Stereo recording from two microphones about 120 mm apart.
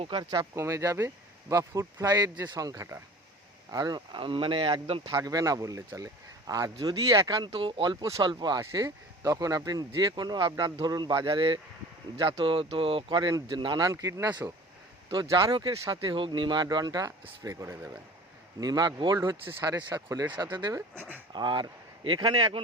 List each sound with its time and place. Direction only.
0.0 s speech: 45° right (ahead or behind)
0.5 s speech: 25° right (ahead or behind); by 5.1 s 50° right (ahead or behind)
5.1 s speech: 30° right (ahead or behind)
8.0 s speech: 30° right (ahead or behind)
15.1 s speech: 40° right (ahead or behind); by 17.9 s 20° right (ahead or behind)
18.6 s speech: 35° right (ahead or behind)
19.6 s speech: 35° right (ahead or behind)